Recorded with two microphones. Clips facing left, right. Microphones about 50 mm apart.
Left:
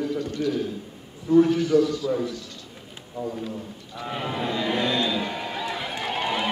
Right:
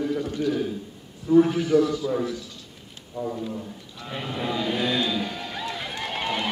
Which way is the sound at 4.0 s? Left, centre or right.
Centre.